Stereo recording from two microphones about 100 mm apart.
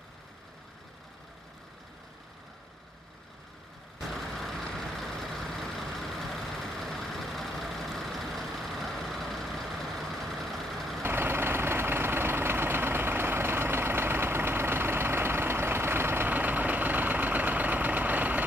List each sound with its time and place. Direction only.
4.1 s vehicle: centre (ahead or behind)
11.0 s vehicle: 20° right (ahead or behind)